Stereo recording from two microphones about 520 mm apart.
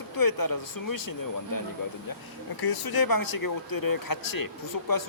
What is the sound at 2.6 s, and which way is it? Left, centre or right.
Speech, left.